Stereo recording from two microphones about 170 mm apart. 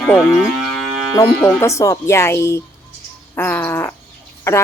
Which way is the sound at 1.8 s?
15° left (ahead or behind).